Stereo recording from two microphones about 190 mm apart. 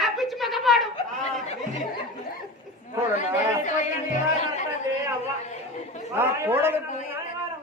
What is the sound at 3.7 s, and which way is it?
Music, 40° left (ahead or behind).